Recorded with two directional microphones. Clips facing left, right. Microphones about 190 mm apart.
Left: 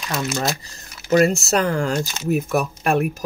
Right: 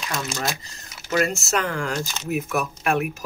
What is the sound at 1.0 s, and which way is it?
Speech, 35° left (ahead or behind).